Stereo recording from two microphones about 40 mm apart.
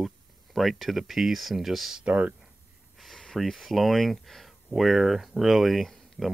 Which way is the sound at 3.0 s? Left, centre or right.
Centre.